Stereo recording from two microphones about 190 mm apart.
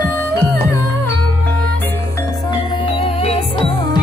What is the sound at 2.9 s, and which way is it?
Music, 30° left (ahead or behind).